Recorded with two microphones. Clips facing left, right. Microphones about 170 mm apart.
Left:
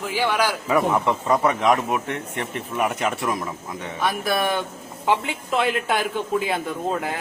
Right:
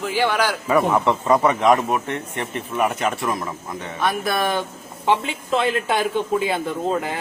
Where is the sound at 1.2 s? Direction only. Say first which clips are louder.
Right 3 dB; centre (ahead or behind).